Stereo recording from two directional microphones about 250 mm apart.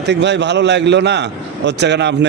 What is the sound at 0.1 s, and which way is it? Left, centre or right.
A man's voice, right.